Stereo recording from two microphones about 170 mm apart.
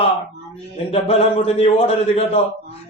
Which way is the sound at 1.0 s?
35° left (ahead or behind).